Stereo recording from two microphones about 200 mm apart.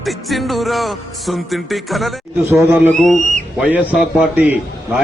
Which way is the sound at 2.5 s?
10° right (ahead or behind).